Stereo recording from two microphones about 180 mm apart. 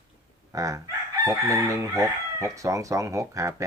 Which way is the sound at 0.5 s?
20° right (ahead or behind).